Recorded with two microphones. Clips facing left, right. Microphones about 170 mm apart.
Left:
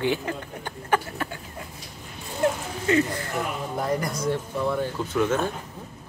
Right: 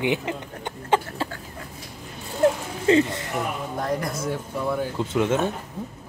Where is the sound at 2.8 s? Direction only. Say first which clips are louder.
Right 4 dB; 25° right (ahead or behind).